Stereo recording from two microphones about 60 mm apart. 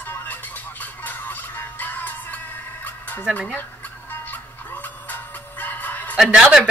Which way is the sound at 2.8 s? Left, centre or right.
Left.